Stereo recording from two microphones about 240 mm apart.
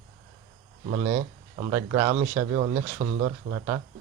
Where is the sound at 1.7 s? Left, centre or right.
Centre.